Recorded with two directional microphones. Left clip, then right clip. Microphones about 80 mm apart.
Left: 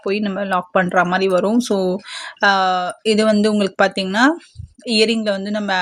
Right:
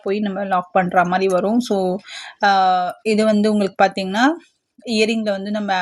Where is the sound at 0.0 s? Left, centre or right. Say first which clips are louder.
Left 1 dB; left.